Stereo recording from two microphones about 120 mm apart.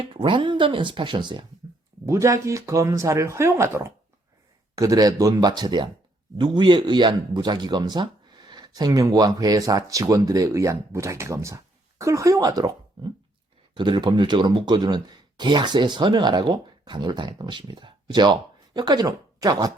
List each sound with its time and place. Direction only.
0.0 s speech: 45° right (ahead or behind)
2.0 s speech: 25° right (ahead or behind)